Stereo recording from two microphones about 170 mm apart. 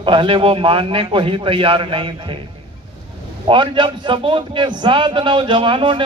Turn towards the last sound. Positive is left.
turn(degrees=-30)  # may be behind; listen again after turning